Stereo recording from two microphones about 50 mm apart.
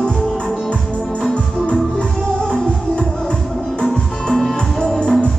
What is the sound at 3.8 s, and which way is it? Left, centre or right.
Music, centre.